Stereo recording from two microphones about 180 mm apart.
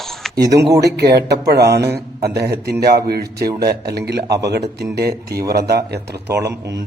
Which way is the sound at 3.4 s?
20° right (ahead or behind).